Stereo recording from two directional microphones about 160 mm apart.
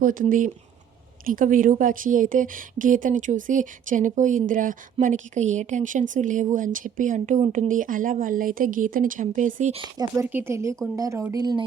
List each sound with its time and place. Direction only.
0.0 s a woman's voice: 60° right (ahead or behind)
10.0 s speech: 15° right (ahead or behind)